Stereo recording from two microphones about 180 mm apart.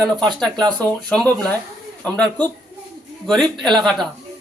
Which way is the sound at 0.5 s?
25° right (ahead or behind).